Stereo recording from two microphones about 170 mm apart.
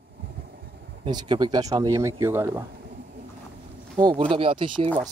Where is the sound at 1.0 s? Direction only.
25° right (ahead or behind).